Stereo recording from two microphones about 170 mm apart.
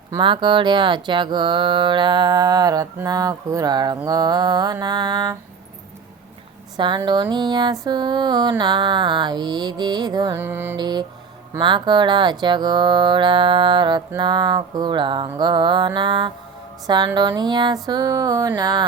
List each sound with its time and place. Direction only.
0.1 s speech: 30° right (ahead or behind)
6.7 s speech: 30° right (ahead or behind)
10.3 s music: 15° right (ahead or behind)
10.8 s speech: 25° right (ahead or behind)